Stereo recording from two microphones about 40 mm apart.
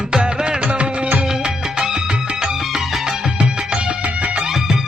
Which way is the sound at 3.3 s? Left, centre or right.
Right.